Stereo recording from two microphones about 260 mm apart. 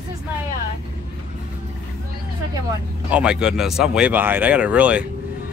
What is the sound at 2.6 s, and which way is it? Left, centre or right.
Speech, centre.